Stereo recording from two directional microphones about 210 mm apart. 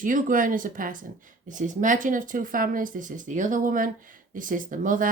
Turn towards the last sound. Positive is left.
turn(degrees=-40)  # may be behind; listen again after turning